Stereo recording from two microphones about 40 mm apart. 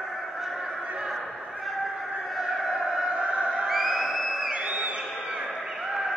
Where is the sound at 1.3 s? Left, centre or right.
Centre.